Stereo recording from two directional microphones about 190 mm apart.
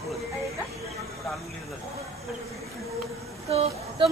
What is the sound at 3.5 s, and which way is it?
Speech, 35° right (ahead or behind).